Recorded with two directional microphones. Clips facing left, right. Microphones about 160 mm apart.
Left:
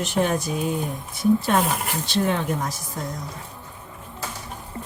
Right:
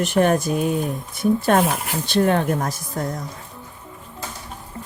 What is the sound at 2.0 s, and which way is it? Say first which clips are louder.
Speech: right 6 dB; 55° right (ahead or behind).